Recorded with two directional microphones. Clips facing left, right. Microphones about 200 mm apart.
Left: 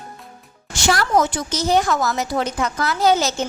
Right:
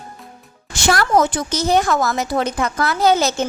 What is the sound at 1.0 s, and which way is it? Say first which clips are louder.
A woman's voice: right 3 dB; 55° right (ahead or behind).